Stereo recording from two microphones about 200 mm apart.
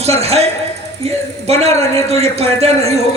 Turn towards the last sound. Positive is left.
turn(degrees=-30)  # may be behind; listen again after turning